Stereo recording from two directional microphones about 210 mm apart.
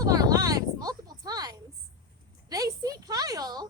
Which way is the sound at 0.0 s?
15° right (ahead or behind).